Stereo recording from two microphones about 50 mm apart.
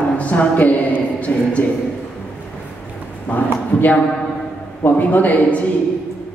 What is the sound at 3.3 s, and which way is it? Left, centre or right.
A man's voice, left.